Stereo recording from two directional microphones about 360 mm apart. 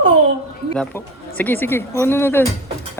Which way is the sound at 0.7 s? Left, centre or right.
Centre.